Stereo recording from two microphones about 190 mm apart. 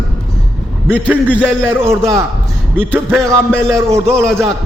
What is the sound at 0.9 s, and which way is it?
A man's voice, 5° right (ahead or behind).